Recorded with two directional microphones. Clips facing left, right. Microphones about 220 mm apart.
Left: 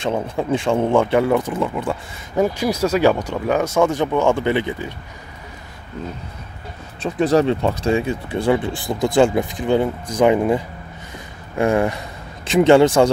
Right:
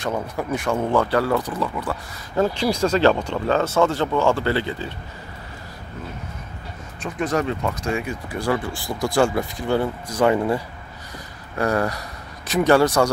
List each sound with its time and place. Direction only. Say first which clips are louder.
0.0 s speech: left 4 dB; 25° left (ahead or behind)
2.4 s speech: left 1 dB; 10° left (ahead or behind)
7.0 s speech: left 7 dB; 30° left (ahead or behind)